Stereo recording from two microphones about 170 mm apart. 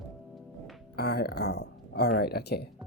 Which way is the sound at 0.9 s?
65° left (ahead or behind).